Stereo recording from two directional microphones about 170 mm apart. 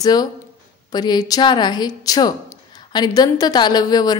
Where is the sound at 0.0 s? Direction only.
25° left (ahead or behind).